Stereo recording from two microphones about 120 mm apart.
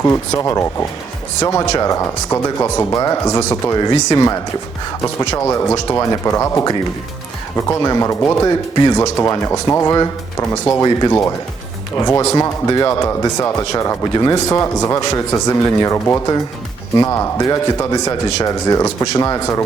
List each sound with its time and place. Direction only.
0.0 s speech: 20° left (ahead or behind)
5.4 s speech: 25° left (ahead or behind)